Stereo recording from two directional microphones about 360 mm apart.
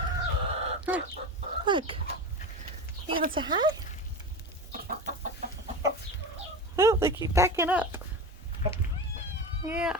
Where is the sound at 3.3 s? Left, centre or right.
Centre.